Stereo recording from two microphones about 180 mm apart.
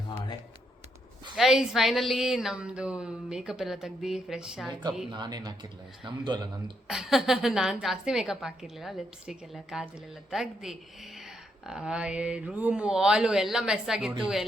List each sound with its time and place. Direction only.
1.4 s a woman's voice: centre (ahead or behind)
4.7 s speech: 25° right (ahead or behind)
6.8 s a woman's voice: centre (ahead or behind)